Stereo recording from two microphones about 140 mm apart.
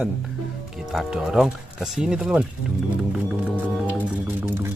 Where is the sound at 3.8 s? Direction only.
15° right (ahead or behind).